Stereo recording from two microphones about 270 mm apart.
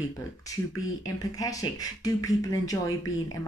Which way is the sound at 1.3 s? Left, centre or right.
Centre.